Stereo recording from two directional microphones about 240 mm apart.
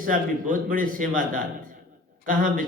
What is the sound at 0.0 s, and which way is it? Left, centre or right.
Speech, right.